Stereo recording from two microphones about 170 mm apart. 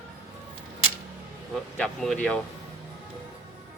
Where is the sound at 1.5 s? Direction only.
5° left (ahead or behind).